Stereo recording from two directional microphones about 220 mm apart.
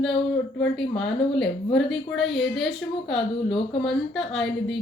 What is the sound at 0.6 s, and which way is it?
Speech, 5° left (ahead or behind).